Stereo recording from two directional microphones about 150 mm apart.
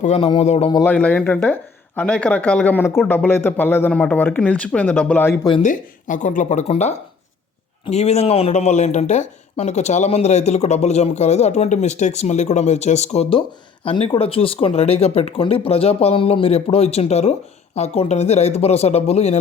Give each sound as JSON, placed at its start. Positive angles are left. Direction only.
{"t": 0.0, "sound": "speech", "side_deg": 45}
{"t": 0.9, "sound": "speech", "side_deg": 10}
{"t": 5.4, "sound": "speech", "side_deg": 30}
{"t": 5.6, "sound": "speech", "side_deg": 60}